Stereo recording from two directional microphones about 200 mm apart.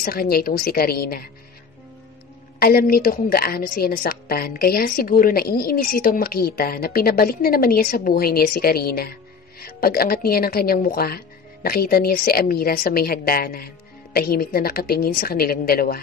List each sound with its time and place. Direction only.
0.0 s a woman's voice: 50° left (ahead or behind)
2.6 s a woman's voice: 50° left (ahead or behind)